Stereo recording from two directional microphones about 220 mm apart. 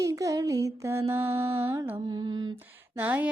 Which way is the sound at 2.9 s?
10° right (ahead or behind).